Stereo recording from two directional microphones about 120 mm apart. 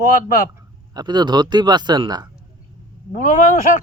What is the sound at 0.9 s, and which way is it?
Speech, 35° right (ahead or behind).